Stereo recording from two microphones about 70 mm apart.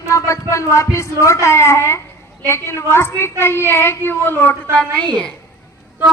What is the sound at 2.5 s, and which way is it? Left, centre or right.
A woman's voice, left.